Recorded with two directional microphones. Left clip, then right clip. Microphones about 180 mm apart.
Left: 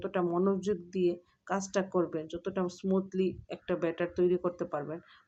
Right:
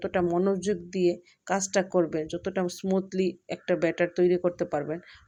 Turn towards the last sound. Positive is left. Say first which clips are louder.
# right 6 dB
turn(degrees=-30)  # may be behind; listen again after turning